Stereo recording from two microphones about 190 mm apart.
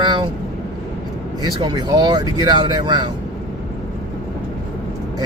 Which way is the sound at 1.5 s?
20° right (ahead or behind).